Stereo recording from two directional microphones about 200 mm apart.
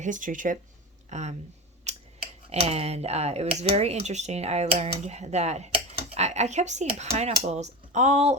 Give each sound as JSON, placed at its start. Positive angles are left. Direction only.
{"t": 0.0, "sound": "speech", "side_deg": -40}
{"t": 1.9, "sound": "scissors", "side_deg": -35}
{"t": 2.5, "sound": "speech", "side_deg": -30}